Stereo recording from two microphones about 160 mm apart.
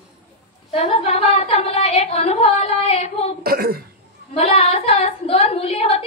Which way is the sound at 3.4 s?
70° right (ahead or behind).